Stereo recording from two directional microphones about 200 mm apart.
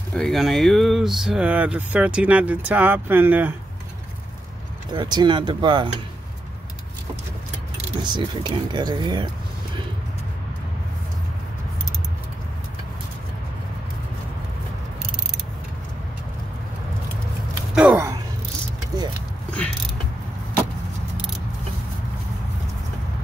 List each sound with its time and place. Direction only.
0.1 s speech: centre (ahead or behind)
4.9 s speech: 20° right (ahead or behind)
8.0 s speech: 20° right (ahead or behind)
17.7 s gasp: 5° right (ahead or behind)
18.9 s vehicle: 20° right (ahead or behind)